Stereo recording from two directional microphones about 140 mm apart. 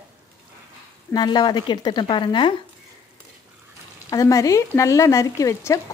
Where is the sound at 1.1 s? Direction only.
30° left (ahead or behind).